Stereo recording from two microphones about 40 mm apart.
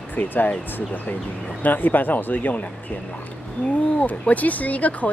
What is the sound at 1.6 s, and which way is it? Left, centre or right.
Speech, left.